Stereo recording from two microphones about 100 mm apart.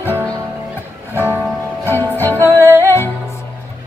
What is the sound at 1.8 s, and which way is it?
Music, 20° left (ahead or behind).